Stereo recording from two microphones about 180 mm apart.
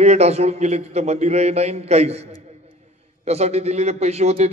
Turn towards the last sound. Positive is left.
turn(degrees=-35)  # may be behind; listen again after turning